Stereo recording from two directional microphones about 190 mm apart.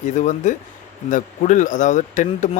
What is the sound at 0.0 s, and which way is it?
Speech, 40° left (ahead or behind).